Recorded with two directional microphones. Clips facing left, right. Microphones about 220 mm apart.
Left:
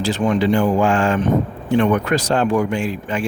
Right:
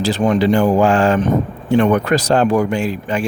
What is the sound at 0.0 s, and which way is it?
Speech, 40° right (ahead or behind).